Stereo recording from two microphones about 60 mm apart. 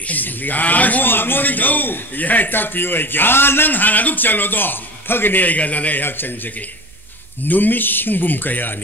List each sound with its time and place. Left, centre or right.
0.1 s a man's voice: left
7.4 s a man's voice: left